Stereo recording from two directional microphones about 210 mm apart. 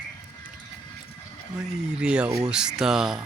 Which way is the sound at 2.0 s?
5° right (ahead or behind).